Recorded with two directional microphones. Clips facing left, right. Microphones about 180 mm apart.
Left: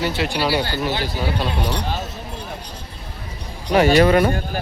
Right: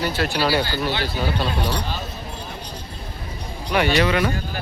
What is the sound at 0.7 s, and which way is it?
Speech, 20° left (ahead or behind).